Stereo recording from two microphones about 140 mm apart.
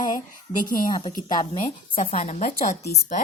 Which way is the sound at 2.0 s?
50° left (ahead or behind).